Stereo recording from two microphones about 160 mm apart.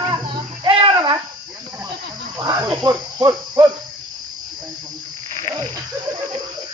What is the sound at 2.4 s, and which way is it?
Cricket, 25° right (ahead or behind).